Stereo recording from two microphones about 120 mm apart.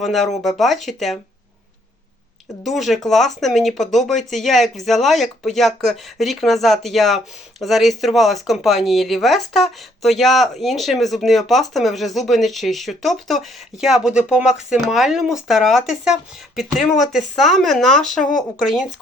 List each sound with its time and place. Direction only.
0.0 s speech: centre (ahead or behind)
2.6 s speech: centre (ahead or behind)